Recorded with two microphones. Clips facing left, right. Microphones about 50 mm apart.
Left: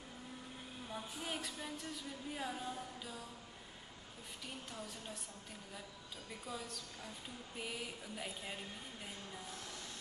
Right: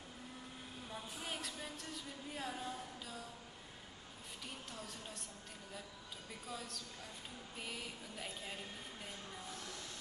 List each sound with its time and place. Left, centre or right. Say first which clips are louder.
0.8 s speech: left 2 dB; centre
4.6 s speech: left 1 dB; centre
6.4 s speech: left 1 dB; centre